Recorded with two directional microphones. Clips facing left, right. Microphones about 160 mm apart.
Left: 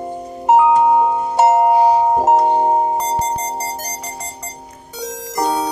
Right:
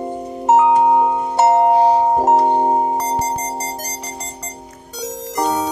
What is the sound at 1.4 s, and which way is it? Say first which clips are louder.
Music: even; 10° left (ahead or behind).